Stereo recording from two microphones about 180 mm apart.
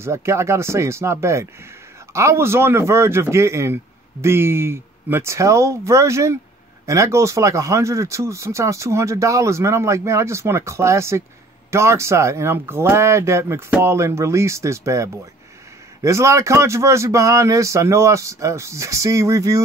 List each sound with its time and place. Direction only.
0.0 s speech: 15° right (ahead or behind)